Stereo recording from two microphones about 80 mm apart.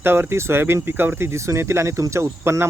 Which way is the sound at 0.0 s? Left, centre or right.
Right.